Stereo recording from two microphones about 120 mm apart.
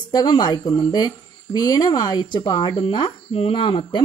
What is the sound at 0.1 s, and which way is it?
Speech, 35° left (ahead or behind).